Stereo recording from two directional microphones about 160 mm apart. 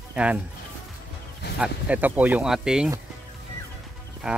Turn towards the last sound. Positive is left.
turn(degrees=-5)  # may be behind; listen again after turning